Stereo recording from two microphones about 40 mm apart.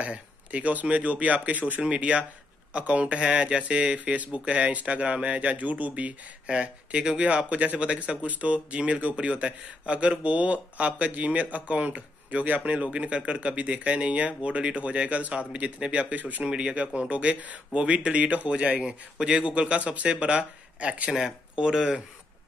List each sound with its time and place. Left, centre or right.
0.0 s speech: right
6.4 s speech: right
16.2 s speech: right
16.4 s speech: right
18.8 s speech: centre
21.5 s speech: centre